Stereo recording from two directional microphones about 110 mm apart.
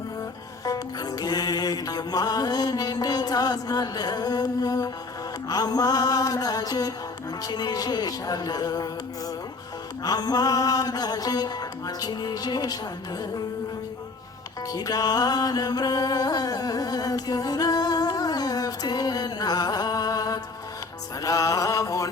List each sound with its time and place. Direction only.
0.6 s music: 35° left (ahead or behind)
10.0 s music: 35° left (ahead or behind)
14.7 s music: 35° left (ahead or behind)
21.2 s mantra: 30° left (ahead or behind)